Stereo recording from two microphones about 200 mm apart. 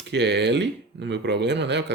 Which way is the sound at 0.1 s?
60° right (ahead or behind).